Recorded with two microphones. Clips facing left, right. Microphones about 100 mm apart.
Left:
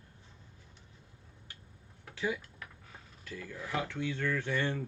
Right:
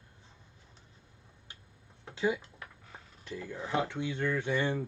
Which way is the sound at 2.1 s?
25° right (ahead or behind).